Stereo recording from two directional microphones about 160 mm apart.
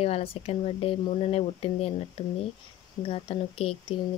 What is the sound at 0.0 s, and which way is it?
Speech, 35° left (ahead or behind).